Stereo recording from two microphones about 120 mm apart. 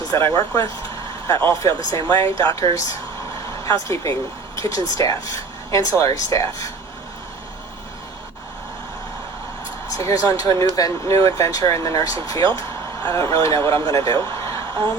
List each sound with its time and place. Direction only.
0.3 s speech: 30° left (ahead or behind)
9.9 s speech: 30° left (ahead or behind)